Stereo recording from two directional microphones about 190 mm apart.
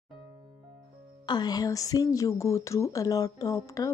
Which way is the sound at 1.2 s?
20° left (ahead or behind).